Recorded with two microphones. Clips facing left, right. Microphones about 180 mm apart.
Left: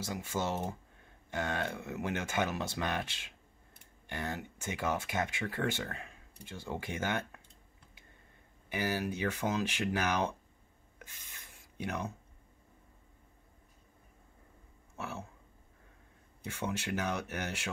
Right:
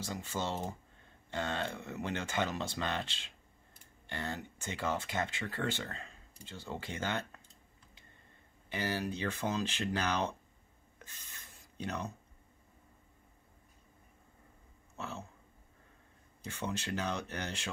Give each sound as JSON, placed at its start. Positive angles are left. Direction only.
{"t": 0.0, "sound": "speech", "side_deg": 10}
{"t": 8.6, "sound": "speech", "side_deg": 10}
{"t": 11.0, "sound": "writing", "side_deg": 10}
{"t": 15.0, "sound": "a sound", "side_deg": 10}
{"t": 16.4, "sound": "speech", "side_deg": 10}